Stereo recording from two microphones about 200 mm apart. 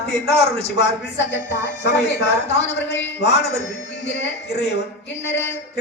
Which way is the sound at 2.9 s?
60° left (ahead or behind).